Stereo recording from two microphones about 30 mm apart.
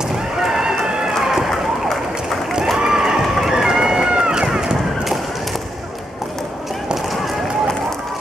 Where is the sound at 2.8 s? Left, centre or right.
Centre.